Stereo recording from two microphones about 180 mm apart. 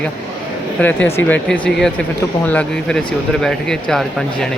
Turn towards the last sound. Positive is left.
turn(degrees=0)  # may be behind; listen again after turning